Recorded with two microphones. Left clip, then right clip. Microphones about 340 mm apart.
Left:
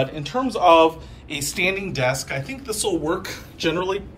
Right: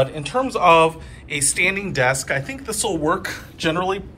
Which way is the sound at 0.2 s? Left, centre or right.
Centre.